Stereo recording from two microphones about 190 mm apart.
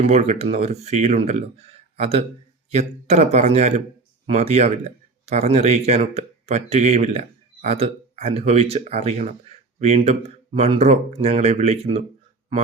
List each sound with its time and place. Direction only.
0.1 s speech: 35° right (ahead or behind)